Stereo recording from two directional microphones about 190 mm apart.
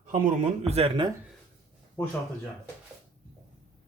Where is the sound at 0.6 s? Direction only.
30° right (ahead or behind).